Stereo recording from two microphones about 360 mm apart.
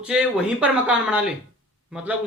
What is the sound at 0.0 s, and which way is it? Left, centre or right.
Speech, centre.